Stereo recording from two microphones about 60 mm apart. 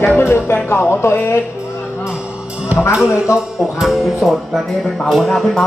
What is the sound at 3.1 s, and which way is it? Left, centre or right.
Speech, left.